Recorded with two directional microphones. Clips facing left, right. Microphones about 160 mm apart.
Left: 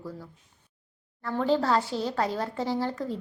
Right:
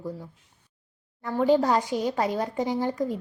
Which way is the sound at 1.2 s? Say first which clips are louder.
Right 4 dB; 15° right (ahead or behind).